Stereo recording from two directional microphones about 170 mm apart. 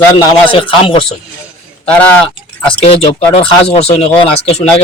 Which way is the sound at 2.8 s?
35° left (ahead or behind).